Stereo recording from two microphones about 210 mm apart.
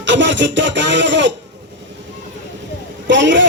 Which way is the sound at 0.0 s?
60° right (ahead or behind).